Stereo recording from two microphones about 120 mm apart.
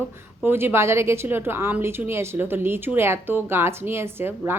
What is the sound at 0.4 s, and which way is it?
A woman's voice, 20° right (ahead or behind).